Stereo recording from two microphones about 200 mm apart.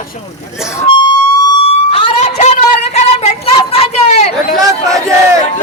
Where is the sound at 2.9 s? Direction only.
30° left (ahead or behind).